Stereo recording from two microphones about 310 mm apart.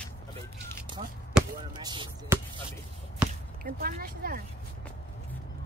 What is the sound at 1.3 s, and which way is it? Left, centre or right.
Basketball bounce, centre.